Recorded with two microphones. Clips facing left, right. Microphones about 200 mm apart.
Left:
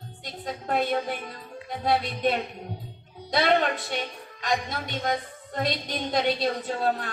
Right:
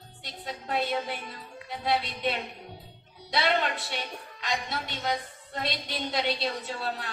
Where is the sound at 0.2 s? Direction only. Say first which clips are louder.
Left 4 dB; 45° left (ahead or behind).